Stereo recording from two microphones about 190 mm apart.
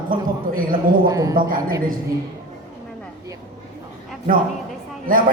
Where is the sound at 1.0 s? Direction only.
20° right (ahead or behind).